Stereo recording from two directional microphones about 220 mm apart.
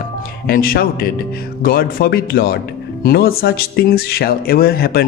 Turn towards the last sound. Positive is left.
turn(degrees=45)  # may be behind; listen again after turning